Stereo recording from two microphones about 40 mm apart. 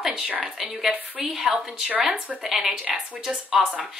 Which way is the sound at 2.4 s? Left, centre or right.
Centre.